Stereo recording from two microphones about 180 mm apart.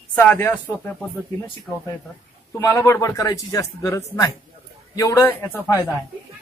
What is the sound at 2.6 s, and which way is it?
A man's voice, 15° left (ahead or behind).